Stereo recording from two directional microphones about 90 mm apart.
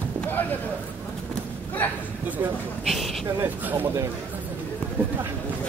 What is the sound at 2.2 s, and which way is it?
Speech, 20° right (ahead or behind).